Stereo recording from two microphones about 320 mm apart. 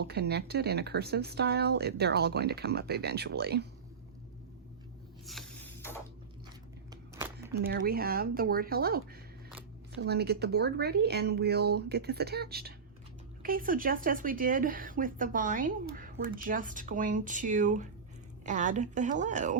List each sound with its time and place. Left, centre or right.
0.0 s speech: right
5.2 s a sound: centre
6.9 s crumpling: centre
7.6 s speech: right
10.0 s speech: right